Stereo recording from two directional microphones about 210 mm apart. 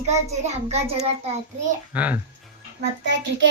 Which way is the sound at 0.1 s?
30° right (ahead or behind).